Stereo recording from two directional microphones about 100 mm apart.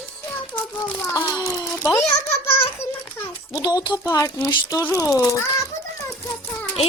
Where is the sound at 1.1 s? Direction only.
30° left (ahead or behind).